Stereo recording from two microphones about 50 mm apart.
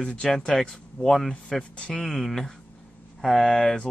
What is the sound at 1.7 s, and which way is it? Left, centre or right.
Speech, centre.